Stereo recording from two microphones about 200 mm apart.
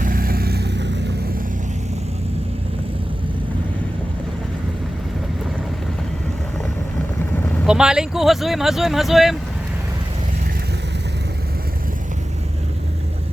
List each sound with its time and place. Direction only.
0.0 s vehicle: 45° right (ahead or behind); by 1.1 s 60° right (ahead or behind)
7.6 s speech: 5° right (ahead or behind)